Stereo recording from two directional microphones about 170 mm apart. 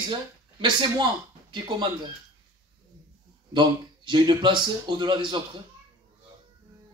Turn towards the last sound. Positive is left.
turn(degrees=-25)  # may be behind; listen again after turning